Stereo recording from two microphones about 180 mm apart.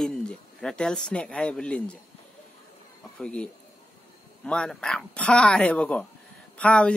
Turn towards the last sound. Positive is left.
turn(degrees=5)  # may be behind; listen again after turning